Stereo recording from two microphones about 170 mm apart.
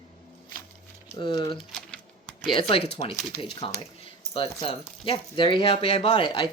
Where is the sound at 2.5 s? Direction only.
30° left (ahead or behind).